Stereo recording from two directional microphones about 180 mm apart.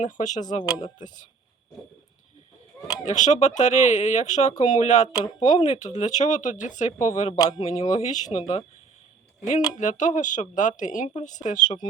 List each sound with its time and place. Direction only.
0.0 s speech: 45° left (ahead or behind)
0.7 s speech: 25° left (ahead or behind)
1.0 s speech: 45° left (ahead or behind)
3.0 s speech: 40° left (ahead or behind)
7.3 s speech: 20° left (ahead or behind)
7.6 s speech: 40° left (ahead or behind)
9.7 s speech: 45° left (ahead or behind)